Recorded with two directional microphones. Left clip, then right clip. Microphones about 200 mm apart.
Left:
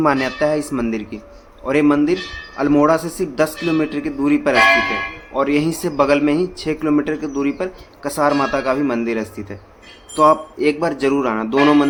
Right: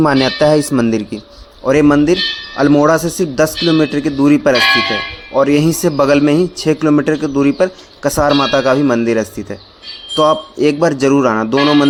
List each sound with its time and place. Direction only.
0.0 s speech: 40° right (ahead or behind)